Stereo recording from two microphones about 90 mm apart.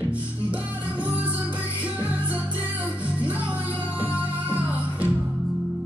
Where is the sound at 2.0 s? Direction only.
20° right (ahead or behind).